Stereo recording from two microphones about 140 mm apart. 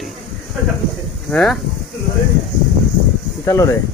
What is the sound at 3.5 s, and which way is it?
Speech, 25° left (ahead or behind).